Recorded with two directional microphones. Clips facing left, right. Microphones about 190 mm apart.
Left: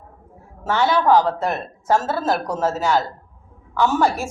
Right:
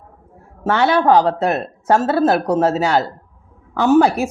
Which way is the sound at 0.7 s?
65° right (ahead or behind).